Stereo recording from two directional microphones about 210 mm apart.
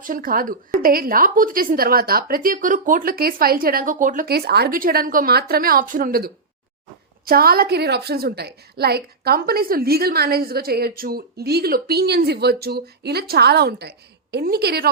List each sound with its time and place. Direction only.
0.0 s a woman's voice: 40° right (ahead or behind)